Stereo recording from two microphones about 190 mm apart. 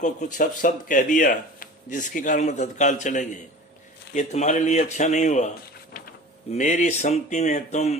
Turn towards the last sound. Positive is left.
turn(degrees=40)  # may be behind; listen again after turning